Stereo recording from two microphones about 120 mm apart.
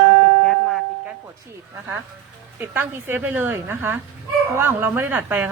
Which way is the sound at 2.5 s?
15° right (ahead or behind).